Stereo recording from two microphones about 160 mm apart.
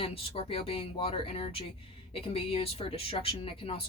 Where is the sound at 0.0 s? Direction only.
35° left (ahead or behind).